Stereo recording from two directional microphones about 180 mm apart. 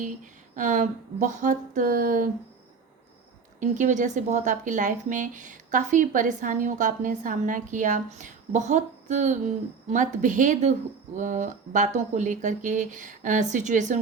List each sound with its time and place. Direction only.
0.5 s speech: 45° right (ahead or behind)
3.6 s speech: 45° right (ahead or behind)